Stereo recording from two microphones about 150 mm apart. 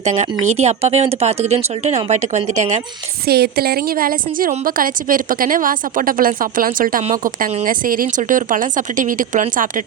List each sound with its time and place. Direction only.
0.0 s speech: 50° right (ahead or behind)
3.2 s a woman's voice: 90° right; by 9.8 s 60° right (ahead or behind)